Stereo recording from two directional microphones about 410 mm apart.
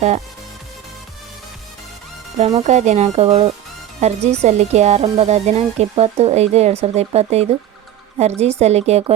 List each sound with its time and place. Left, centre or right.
2.4 s speech: centre